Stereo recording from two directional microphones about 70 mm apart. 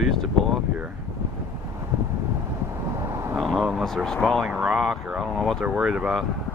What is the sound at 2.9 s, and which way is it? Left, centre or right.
Vehicle, right.